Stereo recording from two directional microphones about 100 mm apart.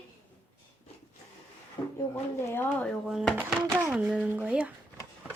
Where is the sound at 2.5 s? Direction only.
20° left (ahead or behind).